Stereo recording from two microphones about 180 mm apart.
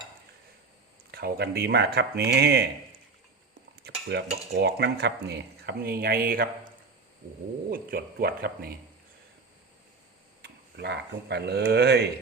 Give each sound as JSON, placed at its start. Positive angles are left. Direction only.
{"t": 1.1, "sound": "dishes", "side_deg": -60}
{"t": 3.8, "sound": "dishes", "side_deg": -65}
{"t": 7.7, "sound": "dishes", "side_deg": -55}
{"t": 10.4, "sound": "speech", "side_deg": -70}